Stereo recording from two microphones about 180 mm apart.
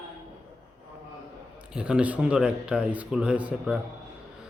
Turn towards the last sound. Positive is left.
turn(degrees=-5)  # may be behind; listen again after turning